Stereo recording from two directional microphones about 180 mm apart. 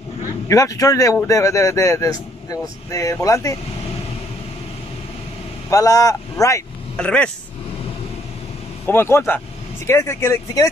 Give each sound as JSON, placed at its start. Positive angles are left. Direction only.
{"t": 0.5, "sound": "speech", "side_deg": 20}
{"t": 5.7, "sound": "speech", "side_deg": 20}
{"t": 7.0, "sound": "speech", "side_deg": 5}
{"t": 8.8, "sound": "speech", "side_deg": 10}